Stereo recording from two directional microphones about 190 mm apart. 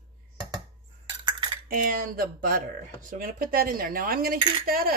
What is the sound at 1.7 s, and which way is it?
Speech, 50° right (ahead or behind).